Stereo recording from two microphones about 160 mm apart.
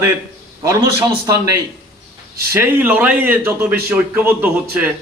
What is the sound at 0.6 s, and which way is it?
A man's voice, 20° right (ahead or behind).